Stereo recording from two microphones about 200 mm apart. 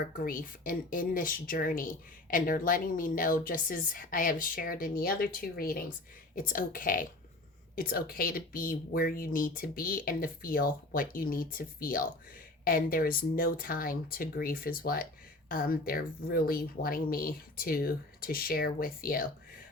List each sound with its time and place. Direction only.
0.2 s speech: 45° left (ahead or behind)